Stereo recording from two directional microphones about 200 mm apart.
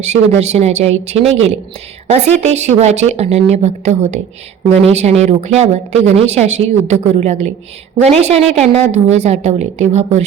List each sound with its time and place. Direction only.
0.0 s speech: 35° right (ahead or behind)